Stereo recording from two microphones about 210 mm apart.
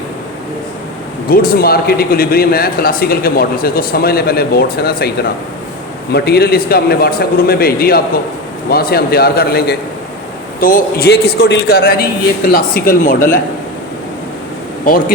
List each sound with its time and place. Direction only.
1.3 s speech: 45° left (ahead or behind)